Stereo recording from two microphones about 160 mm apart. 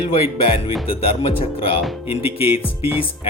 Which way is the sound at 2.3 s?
35° left (ahead or behind).